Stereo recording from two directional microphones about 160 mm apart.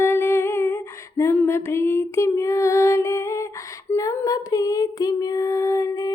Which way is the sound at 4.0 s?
20° left (ahead or behind).